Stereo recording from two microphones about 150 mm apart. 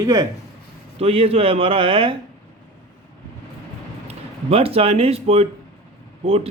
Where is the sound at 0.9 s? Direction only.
40° right (ahead or behind).